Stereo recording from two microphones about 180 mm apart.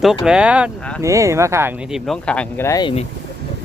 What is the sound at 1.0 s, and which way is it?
Speech, 15° right (ahead or behind).